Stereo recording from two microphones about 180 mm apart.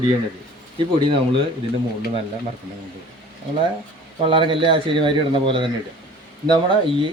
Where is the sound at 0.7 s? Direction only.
30° right (ahead or behind).